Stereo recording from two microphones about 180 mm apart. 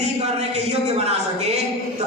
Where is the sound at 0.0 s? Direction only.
35° right (ahead or behind).